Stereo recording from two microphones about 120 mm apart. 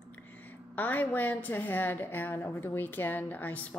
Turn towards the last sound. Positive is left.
turn(degrees=10)  # may be behind; listen again after turning